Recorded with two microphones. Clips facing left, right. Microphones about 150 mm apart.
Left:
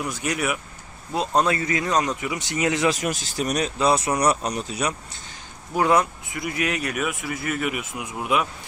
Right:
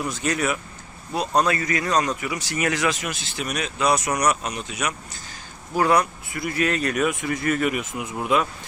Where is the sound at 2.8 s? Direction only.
40° left (ahead or behind).